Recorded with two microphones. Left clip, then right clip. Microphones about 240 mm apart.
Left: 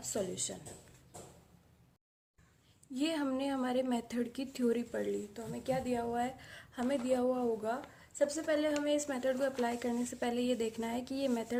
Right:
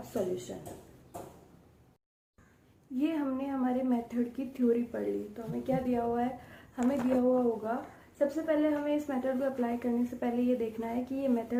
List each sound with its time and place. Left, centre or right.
2.9 s speech: left